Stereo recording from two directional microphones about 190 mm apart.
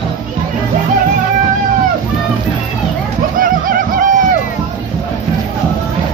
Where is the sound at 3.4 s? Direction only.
45° right (ahead or behind).